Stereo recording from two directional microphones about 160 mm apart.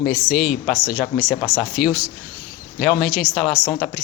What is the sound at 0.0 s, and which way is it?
Speech, 5° right (ahead or behind).